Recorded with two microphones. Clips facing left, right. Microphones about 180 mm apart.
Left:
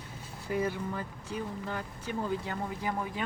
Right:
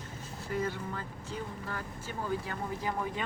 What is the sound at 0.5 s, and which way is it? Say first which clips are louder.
Speech: left 3 dB; 15° left (ahead or behind).